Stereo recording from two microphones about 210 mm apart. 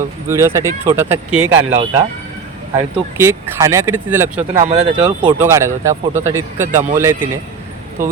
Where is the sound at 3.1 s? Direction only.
10° right (ahead or behind).